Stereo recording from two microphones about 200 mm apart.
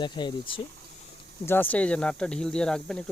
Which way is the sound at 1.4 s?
10° left (ahead or behind).